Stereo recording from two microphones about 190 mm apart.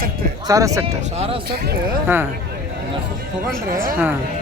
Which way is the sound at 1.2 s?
30° right (ahead or behind).